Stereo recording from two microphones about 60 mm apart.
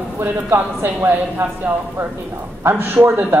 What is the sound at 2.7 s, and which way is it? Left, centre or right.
Speech, right.